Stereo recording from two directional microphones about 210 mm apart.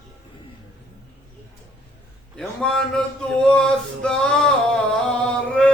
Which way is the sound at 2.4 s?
5° left (ahead or behind).